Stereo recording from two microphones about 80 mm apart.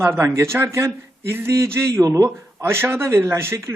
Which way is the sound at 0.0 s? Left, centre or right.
Right.